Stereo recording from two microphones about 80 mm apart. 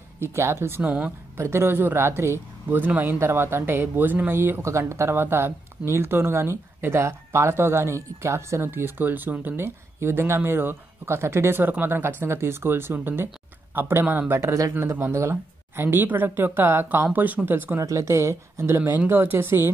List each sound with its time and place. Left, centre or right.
0.2 s speech: right
0.8 s speech: centre
1.3 s speech: right
17.7 s speech: right